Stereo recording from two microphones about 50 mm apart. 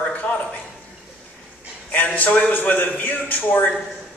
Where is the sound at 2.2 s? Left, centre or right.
Left.